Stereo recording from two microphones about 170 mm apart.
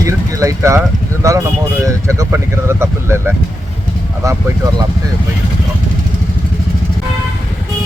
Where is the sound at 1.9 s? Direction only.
20° right (ahead or behind).